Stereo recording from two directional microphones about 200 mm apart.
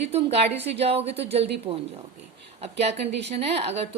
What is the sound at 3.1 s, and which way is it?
Speech, 60° right (ahead or behind).